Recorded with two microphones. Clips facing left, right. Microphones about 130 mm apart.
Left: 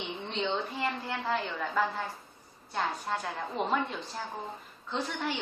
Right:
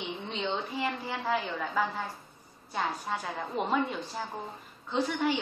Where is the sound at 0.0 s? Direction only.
5° right (ahead or behind).